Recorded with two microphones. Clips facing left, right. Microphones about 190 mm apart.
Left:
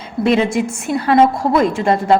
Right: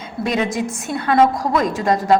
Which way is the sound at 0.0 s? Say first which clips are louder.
Left 6 dB; 30° left (ahead or behind).